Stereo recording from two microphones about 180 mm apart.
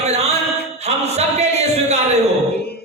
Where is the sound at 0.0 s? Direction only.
40° right (ahead or behind).